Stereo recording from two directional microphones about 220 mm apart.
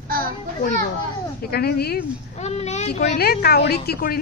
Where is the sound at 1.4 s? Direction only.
45° left (ahead or behind).